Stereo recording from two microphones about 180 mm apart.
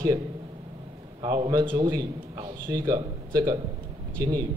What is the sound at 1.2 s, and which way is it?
A man's voice, 25° right (ahead or behind).